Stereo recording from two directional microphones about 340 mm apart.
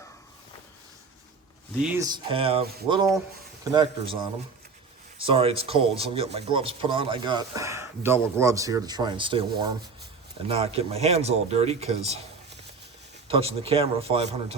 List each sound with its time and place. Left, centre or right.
1.8 s speech: centre
13.2 s speech: centre